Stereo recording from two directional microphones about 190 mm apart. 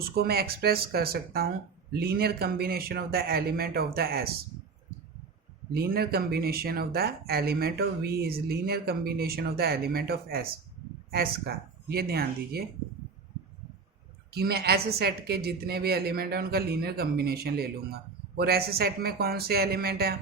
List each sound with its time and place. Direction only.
0.1 s a woman's voice: 55° right (ahead or behind)
5.7 s speech: 55° right (ahead or behind)
14.3 s a woman's voice: 55° right (ahead or behind)